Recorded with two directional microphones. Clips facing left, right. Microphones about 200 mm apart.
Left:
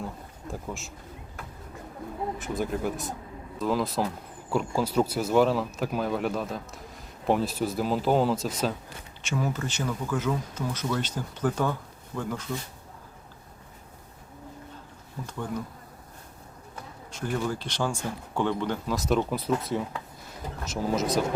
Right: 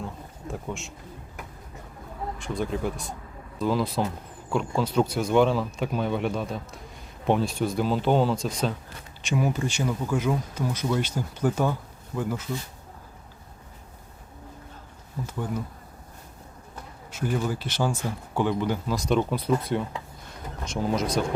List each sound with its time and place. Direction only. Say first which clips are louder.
0.0 s bee: right 1 dB; centre (ahead or behind)
2.4 s speech: right 2 dB; 5° left (ahead or behind)
9.2 s speech: right 4 dB; 15° right (ahead or behind)
15.3 s speech: right 2 dB; 5° right (ahead or behind)
17.1 s speech: right 2 dB; 5° right (ahead or behind)
18.9 s speech: right 1 dB; 5° left (ahead or behind)